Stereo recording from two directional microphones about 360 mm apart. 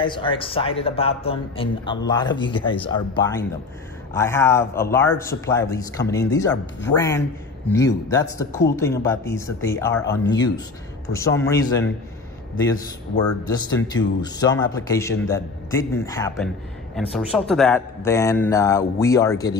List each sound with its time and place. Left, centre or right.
0.0 s a man's voice: centre
13.7 s a man's voice: centre